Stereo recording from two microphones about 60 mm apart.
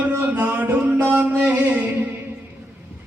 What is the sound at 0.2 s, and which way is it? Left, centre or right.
Music, right.